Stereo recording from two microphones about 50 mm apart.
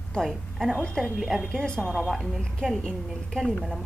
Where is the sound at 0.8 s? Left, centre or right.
Centre.